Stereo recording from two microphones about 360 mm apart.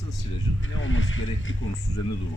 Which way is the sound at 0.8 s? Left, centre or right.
Left.